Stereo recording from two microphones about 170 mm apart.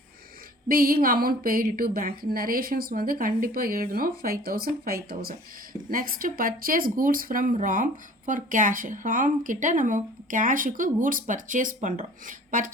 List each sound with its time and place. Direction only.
0.7 s a woman's voice: 60° right (ahead or behind)